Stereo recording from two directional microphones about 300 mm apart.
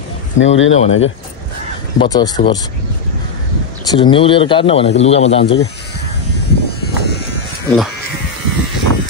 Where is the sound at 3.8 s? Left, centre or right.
Centre.